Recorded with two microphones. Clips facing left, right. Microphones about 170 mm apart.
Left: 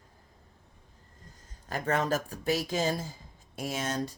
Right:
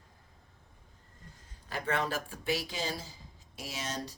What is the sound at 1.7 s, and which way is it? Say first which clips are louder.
Speech: left 4 dB; 45° left (ahead or behind).